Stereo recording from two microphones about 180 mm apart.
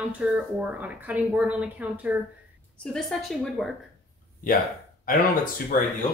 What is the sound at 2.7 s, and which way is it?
Speech, 5° left (ahead or behind).